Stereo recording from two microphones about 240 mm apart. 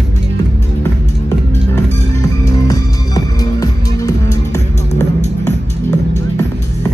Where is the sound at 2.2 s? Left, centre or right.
Centre.